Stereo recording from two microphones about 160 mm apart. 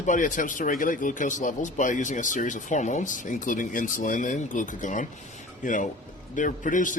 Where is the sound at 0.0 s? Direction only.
55° left (ahead or behind).